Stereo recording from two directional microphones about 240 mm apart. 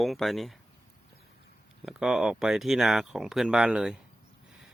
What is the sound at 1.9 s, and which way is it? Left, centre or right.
Speech, centre.